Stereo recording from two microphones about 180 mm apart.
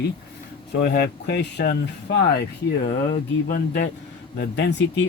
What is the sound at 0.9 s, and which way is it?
Speech, 70° left (ahead or behind).